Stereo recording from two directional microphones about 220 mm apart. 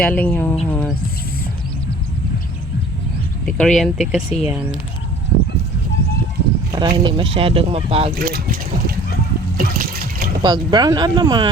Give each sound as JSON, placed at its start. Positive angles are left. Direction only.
{"t": 0.0, "sound": "speech", "side_deg": 5}
{"t": 3.4, "sound": "speech", "side_deg": 5}
{"t": 6.7, "sound": "speech", "side_deg": -20}
{"t": 8.1, "sound": "speech", "side_deg": -40}
{"t": 9.6, "sound": "water", "side_deg": -45}
{"t": 10.4, "sound": "speech", "side_deg": -20}